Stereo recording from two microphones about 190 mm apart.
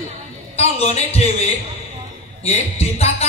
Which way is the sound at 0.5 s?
35° left (ahead or behind).